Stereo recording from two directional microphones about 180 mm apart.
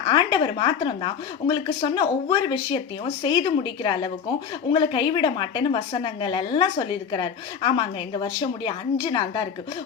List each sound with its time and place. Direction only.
0.1 s a woman's voice: 25° left (ahead or behind)